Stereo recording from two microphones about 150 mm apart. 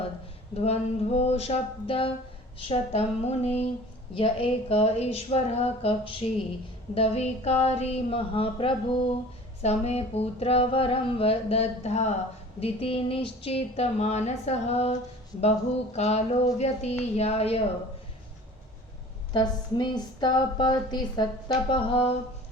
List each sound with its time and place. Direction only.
0.6 s speech: 45° left (ahead or behind)
2.6 s music: 45° left (ahead or behind)
4.1 s speech: 35° left (ahead or behind)
6.9 s music: 45° left (ahead or behind)
9.6 s music: 45° left (ahead or behind)
19.3 s a woman's voice: 30° left (ahead or behind)